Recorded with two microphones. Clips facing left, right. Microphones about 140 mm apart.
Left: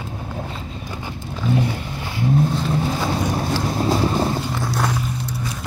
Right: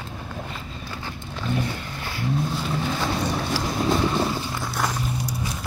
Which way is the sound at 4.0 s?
35° left (ahead or behind).